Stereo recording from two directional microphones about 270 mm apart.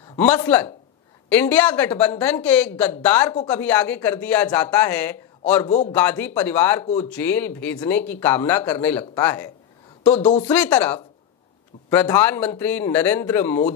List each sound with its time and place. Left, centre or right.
0.0 s a sound: left
0.3 s speech: centre
5.7 s a man's voice: left
5.9 s speech: centre
10.2 s a man's voice: left
10.5 s speech: centre